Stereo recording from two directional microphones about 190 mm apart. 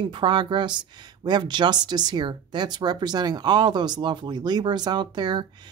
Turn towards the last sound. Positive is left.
turn(degrees=-25)  # may be behind; listen again after turning